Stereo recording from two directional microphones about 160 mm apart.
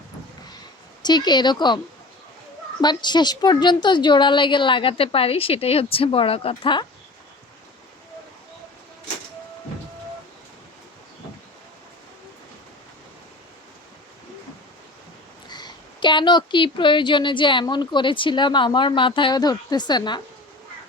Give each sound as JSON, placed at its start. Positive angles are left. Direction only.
{"t": 1.0, "sound": "a woman's voice", "side_deg": 25}
{"t": 2.8, "sound": "a woman's voice", "side_deg": 25}
{"t": 15.4, "sound": "a woman's voice", "side_deg": 25}